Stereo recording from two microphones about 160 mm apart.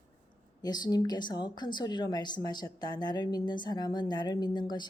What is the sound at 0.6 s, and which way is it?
A woman's voice, 25° left (ahead or behind).